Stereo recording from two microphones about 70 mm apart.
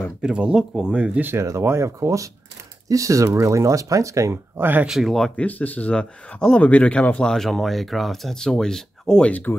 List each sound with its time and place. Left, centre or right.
0.2 s speech: centre
1.6 s speech: right
4.6 s speech: right
4.8 s speech: centre
5.3 s speech: left
9.3 s speech: left